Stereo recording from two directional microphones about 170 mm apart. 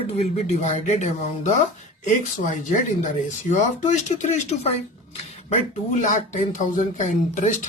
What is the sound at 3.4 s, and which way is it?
Speech, 45° left (ahead or behind).